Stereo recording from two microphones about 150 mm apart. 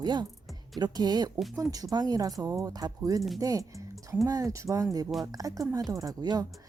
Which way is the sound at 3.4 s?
20° right (ahead or behind).